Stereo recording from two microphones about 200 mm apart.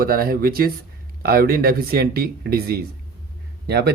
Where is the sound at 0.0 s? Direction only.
45° right (ahead or behind).